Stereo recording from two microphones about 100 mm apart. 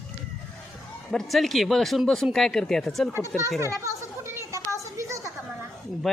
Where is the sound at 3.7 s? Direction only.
25° right (ahead or behind).